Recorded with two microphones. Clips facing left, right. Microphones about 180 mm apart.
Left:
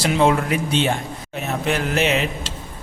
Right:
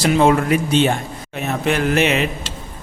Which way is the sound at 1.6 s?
60° right (ahead or behind).